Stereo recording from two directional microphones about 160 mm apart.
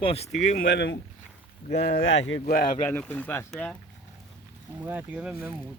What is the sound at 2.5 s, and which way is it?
Speech, 65° left (ahead or behind).